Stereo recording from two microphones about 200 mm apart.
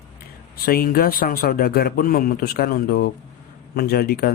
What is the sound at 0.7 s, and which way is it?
A man's voice, 50° left (ahead or behind).